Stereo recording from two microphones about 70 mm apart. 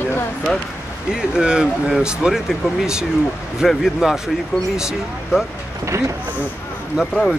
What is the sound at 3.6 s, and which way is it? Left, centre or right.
Speech, centre.